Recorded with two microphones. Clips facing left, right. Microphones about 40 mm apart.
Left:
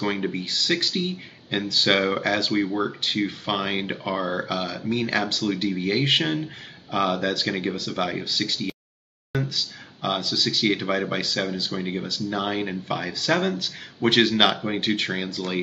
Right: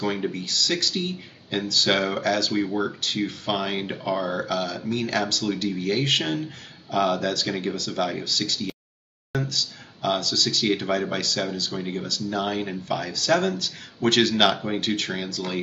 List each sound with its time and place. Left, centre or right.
0.0 s speech: centre